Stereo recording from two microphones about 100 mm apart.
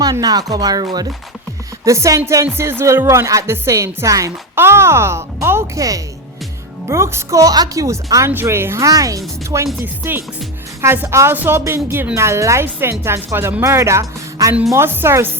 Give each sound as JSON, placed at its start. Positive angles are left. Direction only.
{"t": 0.0, "sound": "speech", "side_deg": -40}
{"t": 1.8, "sound": "speech", "side_deg": -30}
{"t": 8.9, "sound": "speech", "side_deg": -35}
{"t": 9.8, "sound": "a woman's voice", "side_deg": -20}